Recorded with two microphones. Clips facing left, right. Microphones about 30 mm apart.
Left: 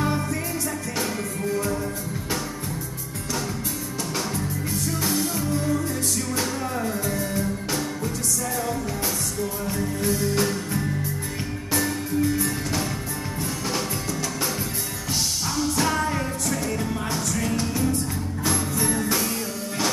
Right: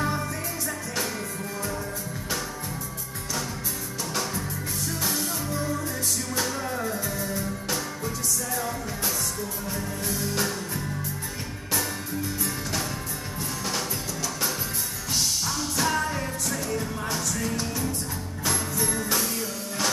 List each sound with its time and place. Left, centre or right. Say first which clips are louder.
5.0 s music: left 4 dB; centre
6.3 s music: left 2 dB; centre
10.0 s music: left 5 dB; centre
15.5 s music: left 5 dB; centre
17.3 s music: left 4 dB; left
18.4 s music: left 2 dB; centre